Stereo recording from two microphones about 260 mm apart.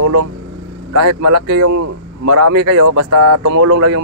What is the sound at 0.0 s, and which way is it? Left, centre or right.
Speech, right.